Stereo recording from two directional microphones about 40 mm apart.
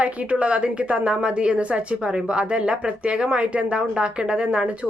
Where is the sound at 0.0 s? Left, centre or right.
Right.